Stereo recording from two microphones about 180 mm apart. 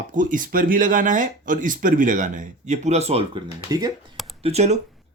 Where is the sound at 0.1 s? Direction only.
45° right (ahead or behind).